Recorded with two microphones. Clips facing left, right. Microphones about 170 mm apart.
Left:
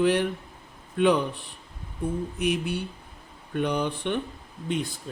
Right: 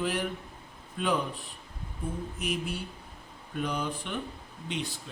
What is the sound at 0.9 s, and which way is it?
Speech, 75° left (ahead or behind).